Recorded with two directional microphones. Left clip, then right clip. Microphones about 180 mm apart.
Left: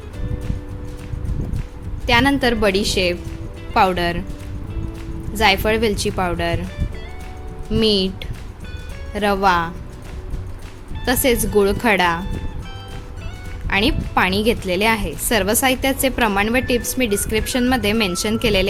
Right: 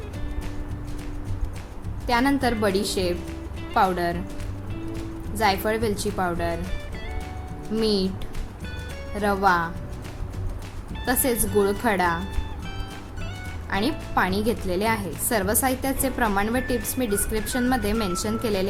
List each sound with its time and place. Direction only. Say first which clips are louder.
2.0 s a woman's voice: left 6 dB; 35° left (ahead or behind)
5.4 s a woman's voice: left 6 dB; 35° left (ahead or behind)
7.7 s a woman's voice: left 6 dB; 35° left (ahead or behind)
9.2 s a woman's voice: left 4 dB; 35° left (ahead or behind)
11.0 s a woman's voice: left 7 dB; 35° left (ahead or behind)
13.7 s a woman's voice: left 8 dB; 35° left (ahead or behind)